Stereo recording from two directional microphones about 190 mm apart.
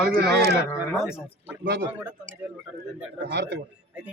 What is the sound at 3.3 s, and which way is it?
Speech, 65° right (ahead or behind).